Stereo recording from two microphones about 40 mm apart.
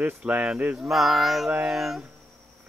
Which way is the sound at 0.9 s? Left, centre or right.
Centre.